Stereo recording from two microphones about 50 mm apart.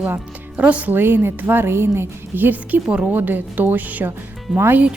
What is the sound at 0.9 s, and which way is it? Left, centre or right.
A woman's voice, right.